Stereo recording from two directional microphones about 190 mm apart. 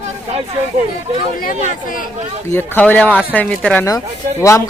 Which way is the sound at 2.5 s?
10° left (ahead or behind).